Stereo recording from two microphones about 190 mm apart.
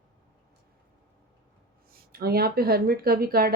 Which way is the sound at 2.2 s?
55° right (ahead or behind).